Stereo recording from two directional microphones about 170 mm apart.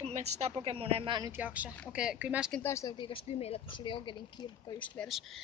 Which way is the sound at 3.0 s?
30° left (ahead or behind).